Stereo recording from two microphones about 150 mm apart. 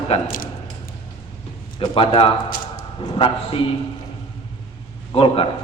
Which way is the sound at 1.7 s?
40° left (ahead or behind).